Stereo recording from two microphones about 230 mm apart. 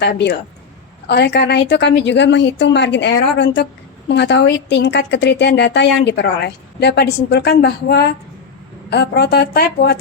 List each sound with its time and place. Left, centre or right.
0.0 s speech: left